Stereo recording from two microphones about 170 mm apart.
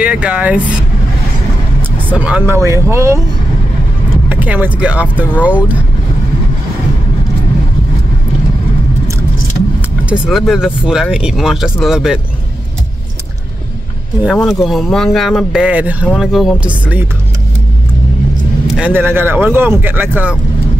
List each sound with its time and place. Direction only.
0.0 s speech: 5° right (ahead or behind)
2.1 s speech: 10° right (ahead or behind)
4.3 s speech: 10° right (ahead or behind)
9.8 s speech: 5° right (ahead or behind)
14.2 s speech: centre (ahead or behind)
18.7 s speech: 10° right (ahead or behind)